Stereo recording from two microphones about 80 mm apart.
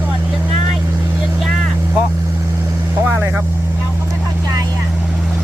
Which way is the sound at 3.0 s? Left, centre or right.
Right.